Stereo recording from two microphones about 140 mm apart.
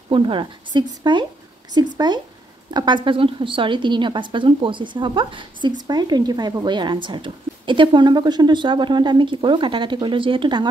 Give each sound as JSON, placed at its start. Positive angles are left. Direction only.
{"t": 0.1, "sound": "a woman's voice", "side_deg": -35}